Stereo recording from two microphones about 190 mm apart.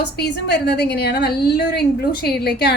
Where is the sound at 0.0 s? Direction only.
60° left (ahead or behind).